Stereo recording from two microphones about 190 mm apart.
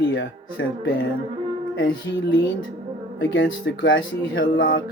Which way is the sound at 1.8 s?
80° left.